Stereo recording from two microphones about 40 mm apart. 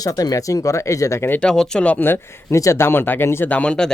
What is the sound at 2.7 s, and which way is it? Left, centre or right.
Speech, left.